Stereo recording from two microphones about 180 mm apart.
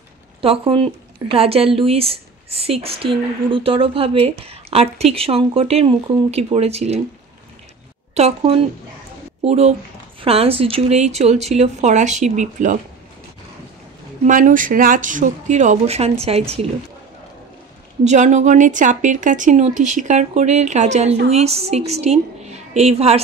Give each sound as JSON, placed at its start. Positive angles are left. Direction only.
{"t": 0.4, "sound": "a woman's voice", "side_deg": -30}
{"t": 8.1, "sound": "a woman's voice", "side_deg": -35}
{"t": 14.2, "sound": "speech", "side_deg": -45}
{"t": 18.0, "sound": "a woman's voice", "side_deg": -40}